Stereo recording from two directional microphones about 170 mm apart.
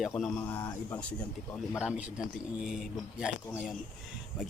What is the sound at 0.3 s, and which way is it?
Speech, 10° left (ahead or behind).